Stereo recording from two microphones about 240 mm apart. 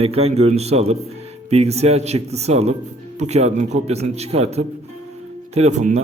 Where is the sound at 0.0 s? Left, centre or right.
Right.